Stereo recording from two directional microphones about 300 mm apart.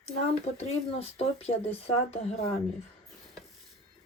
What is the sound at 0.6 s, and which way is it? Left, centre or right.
Speech, left.